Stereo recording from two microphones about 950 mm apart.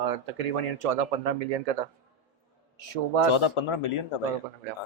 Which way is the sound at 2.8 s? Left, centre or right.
Right.